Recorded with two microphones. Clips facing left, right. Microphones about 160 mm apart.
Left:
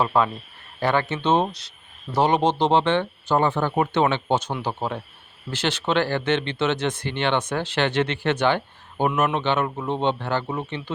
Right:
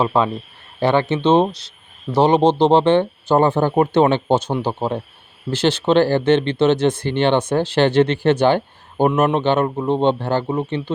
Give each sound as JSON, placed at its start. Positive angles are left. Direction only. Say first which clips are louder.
{"t": 0.0, "sound": "speech", "louder": "right 3 dB", "side_deg": -25}